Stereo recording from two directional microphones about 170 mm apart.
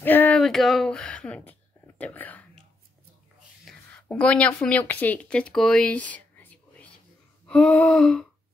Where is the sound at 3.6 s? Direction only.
5° left (ahead or behind).